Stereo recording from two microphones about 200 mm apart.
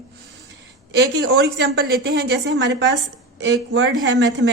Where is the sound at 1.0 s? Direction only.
55° right (ahead or behind).